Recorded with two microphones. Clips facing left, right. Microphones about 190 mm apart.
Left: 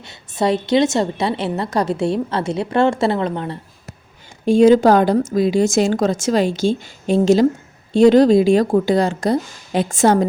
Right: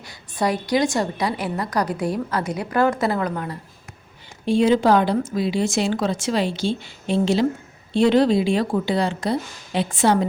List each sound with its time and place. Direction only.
0.0 s a woman's voice: 25° left (ahead or behind)
4.4 s speech: 45° left (ahead or behind)